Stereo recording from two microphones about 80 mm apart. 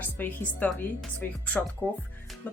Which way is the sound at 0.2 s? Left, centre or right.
Left.